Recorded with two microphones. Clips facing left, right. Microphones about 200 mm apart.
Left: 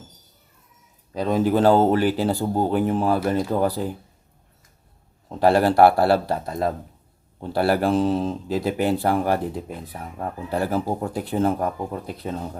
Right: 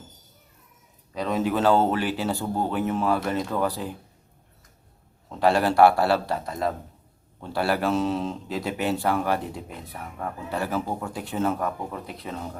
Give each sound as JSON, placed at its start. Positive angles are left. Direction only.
{"t": 1.1, "sound": "speech", "side_deg": 35}
{"t": 5.3, "sound": "speech", "side_deg": 40}
{"t": 6.0, "sound": "speech", "side_deg": 50}
{"t": 6.4, "sound": "speech", "side_deg": 35}
{"t": 7.8, "sound": "speech", "side_deg": 35}